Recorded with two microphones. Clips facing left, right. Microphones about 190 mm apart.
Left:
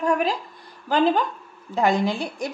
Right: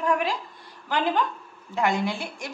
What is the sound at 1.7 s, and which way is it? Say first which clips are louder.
Speech: left 4 dB; 35° left (ahead or behind).